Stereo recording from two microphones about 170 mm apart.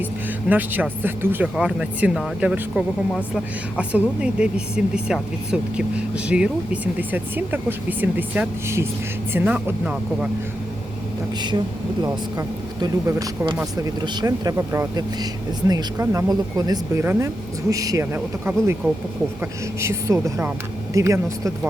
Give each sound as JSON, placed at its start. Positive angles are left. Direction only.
{"t": 0.4, "sound": "speech", "side_deg": -10}
{"t": 12.0, "sound": "speech", "side_deg": -20}